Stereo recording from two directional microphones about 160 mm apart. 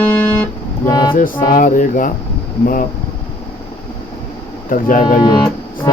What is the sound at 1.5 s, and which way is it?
Music, 55° left (ahead or behind).